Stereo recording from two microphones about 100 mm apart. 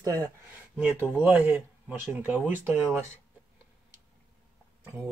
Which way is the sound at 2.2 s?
15° right (ahead or behind).